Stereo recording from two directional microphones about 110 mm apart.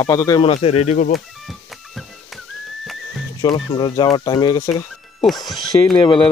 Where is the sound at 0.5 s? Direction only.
75° left (ahead or behind).